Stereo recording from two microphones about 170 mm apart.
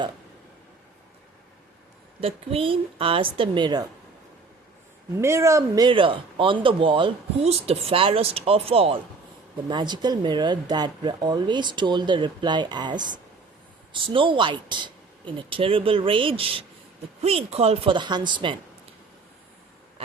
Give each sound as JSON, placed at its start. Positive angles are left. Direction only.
{"t": 2.2, "sound": "speech", "side_deg": -35}
{"t": 5.1, "sound": "speech", "side_deg": -15}
{"t": 20.0, "sound": "a sound", "side_deg": -35}